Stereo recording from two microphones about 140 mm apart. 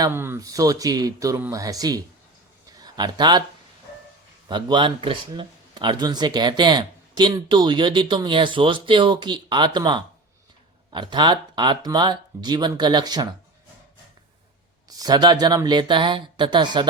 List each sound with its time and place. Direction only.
0.1 s speech: 15° right (ahead or behind)
2.6 s a sound: 30° right (ahead or behind)
4.4 s speech: 35° right (ahead or behind)
14.8 s speech: 25° right (ahead or behind)